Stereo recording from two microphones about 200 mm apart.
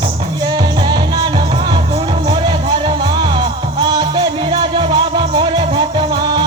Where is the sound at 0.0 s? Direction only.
20° right (ahead or behind).